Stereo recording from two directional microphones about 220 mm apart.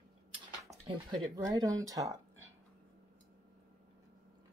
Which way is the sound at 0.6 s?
15° right (ahead or behind).